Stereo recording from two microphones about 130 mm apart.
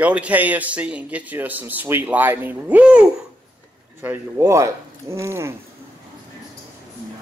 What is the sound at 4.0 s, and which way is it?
Speech, 20° right (ahead or behind).